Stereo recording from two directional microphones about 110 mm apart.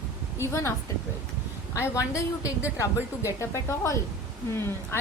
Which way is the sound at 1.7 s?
25° left (ahead or behind).